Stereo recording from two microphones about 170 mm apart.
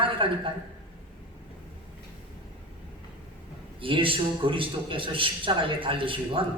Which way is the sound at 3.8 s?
30° right (ahead or behind).